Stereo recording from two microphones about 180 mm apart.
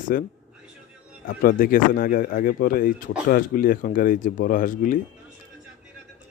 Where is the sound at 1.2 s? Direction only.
50° left (ahead or behind).